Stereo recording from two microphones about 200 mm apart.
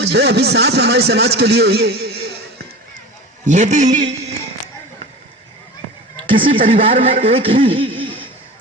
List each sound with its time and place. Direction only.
0.0 s a man's voice: 55° right (ahead or behind)
3.4 s speech: 35° right (ahead or behind)
6.4 s speech: 40° right (ahead or behind)
6.7 s a man's voice: 25° right (ahead or behind)